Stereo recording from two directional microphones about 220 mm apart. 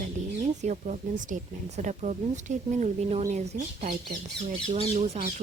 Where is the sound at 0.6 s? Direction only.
35° right (ahead or behind).